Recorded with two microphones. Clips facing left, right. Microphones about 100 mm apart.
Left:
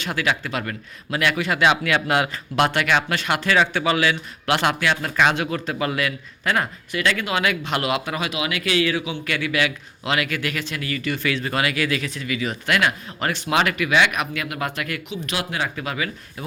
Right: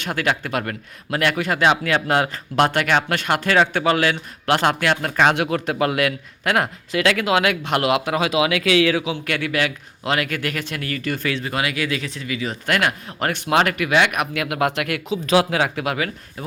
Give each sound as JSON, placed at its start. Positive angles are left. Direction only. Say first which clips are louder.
{"t": 0.0, "sound": "a man's voice", "louder": "right 1 dB", "side_deg": -50}
{"t": 5.3, "sound": "speech", "louder": "right 3 dB", "side_deg": -65}
{"t": 11.3, "sound": "speech", "louder": "left 1 dB", "side_deg": -15}
{"t": 12.6, "sound": "a man's voice", "louder": "right 1 dB", "side_deg": -50}
{"t": 14.3, "sound": "speech", "louder": "right 6 dB", "side_deg": -85}